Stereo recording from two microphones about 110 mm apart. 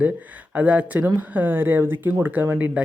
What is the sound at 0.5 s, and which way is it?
Speech, 10° right (ahead or behind).